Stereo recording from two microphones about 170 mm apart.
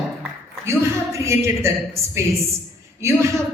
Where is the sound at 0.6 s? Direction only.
15° right (ahead or behind).